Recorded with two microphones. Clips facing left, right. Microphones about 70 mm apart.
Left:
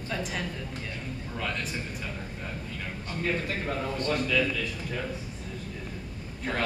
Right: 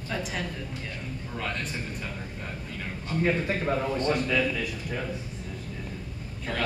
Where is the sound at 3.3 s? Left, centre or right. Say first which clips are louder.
Right 2 dB; centre.